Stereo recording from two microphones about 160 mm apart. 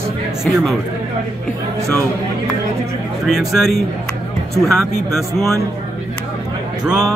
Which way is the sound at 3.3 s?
Centre (ahead or behind).